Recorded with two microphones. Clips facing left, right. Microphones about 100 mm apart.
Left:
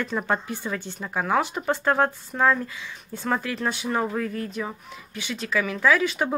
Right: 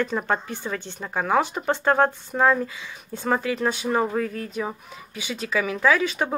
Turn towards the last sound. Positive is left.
turn(degrees=0)  # may be behind; listen again after turning